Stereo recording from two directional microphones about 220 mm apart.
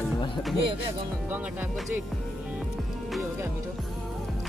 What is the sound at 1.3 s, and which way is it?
Speech, 10° right (ahead or behind).